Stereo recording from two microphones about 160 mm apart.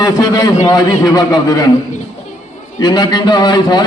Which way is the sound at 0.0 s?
25° left (ahead or behind).